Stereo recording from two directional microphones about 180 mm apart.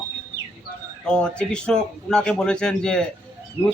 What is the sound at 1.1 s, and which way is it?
A man's voice, 5° left (ahead or behind).